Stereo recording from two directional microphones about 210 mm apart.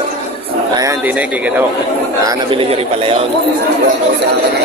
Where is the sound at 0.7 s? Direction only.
15° right (ahead or behind).